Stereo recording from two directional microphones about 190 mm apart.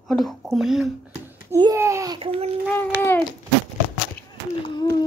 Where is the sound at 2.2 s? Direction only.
30° right (ahead or behind).